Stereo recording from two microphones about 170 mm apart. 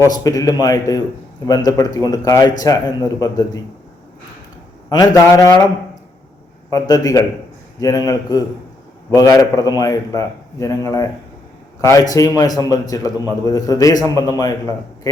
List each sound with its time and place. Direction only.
0.0 s a man's voice: 20° left (ahead or behind)
4.9 s a man's voice: 20° left (ahead or behind)
6.7 s a man's voice: 20° left (ahead or behind)